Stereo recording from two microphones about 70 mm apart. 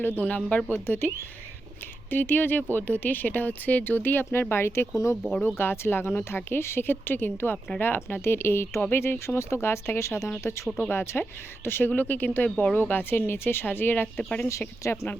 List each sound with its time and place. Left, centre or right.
0.0 s speech: left
0.5 s speech: left
9.1 s speech: left